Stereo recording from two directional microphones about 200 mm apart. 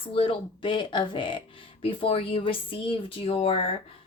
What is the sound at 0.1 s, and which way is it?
Speech, 25° left (ahead or behind).